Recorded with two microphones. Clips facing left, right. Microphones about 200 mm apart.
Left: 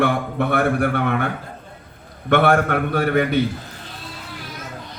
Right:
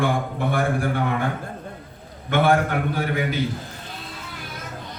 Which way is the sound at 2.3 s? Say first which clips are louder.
Left 3 dB; 65° left (ahead or behind).